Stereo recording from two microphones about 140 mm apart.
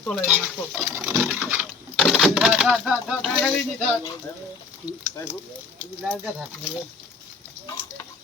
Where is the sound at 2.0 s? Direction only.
Centre (ahead or behind).